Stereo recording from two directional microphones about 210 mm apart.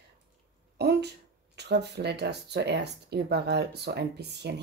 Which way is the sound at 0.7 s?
50° right (ahead or behind).